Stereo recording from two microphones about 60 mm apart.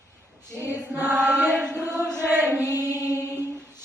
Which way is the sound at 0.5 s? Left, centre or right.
Right.